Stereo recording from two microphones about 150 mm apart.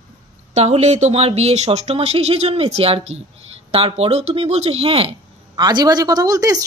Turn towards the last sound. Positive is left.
turn(degrees=-25)  # may be behind; listen again after turning